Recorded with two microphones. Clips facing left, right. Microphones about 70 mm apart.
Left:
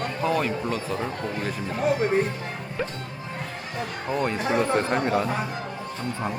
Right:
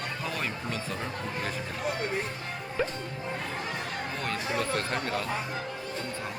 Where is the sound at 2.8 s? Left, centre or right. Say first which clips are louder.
Even; centre.